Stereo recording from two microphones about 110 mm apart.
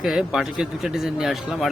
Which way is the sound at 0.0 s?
Centre (ahead or behind).